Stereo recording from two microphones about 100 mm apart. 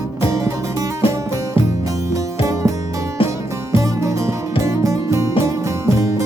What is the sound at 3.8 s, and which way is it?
Music, 30° right (ahead or behind).